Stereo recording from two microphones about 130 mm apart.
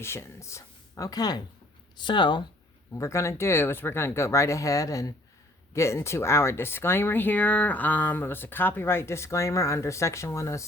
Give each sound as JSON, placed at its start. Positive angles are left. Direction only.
{"t": 0.0, "sound": "speech", "side_deg": 20}
{"t": 2.9, "sound": "speech", "side_deg": 20}